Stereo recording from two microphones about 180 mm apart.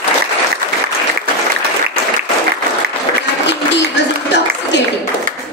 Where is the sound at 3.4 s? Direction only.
75° left (ahead or behind).